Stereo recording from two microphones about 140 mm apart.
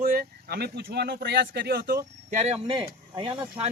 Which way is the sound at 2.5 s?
35° right (ahead or behind).